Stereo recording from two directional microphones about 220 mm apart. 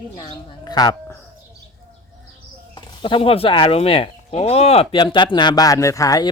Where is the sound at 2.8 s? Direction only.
20° left (ahead or behind).